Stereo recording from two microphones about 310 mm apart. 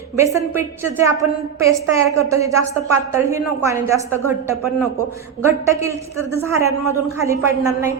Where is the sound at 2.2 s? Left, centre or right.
Centre.